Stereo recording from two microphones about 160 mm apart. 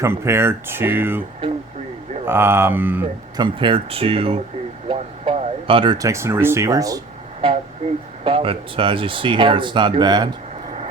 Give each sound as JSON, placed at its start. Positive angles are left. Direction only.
{"t": 0.0, "sound": "speech", "side_deg": -15}
{"t": 2.2, "sound": "speech", "side_deg": -15}
{"t": 3.3, "sound": "speech", "side_deg": -30}
{"t": 7.4, "sound": "a sound", "side_deg": -35}
{"t": 8.2, "sound": "speech", "side_deg": -35}